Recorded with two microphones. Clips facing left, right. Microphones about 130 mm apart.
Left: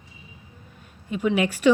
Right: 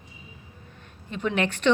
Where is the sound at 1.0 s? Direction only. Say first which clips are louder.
Left 4 dB; 10° left (ahead or behind).